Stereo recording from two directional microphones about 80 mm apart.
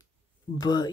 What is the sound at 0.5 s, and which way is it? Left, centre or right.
Speech, left.